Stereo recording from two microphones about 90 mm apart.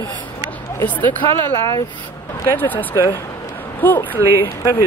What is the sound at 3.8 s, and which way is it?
Speech, 20° left (ahead or behind).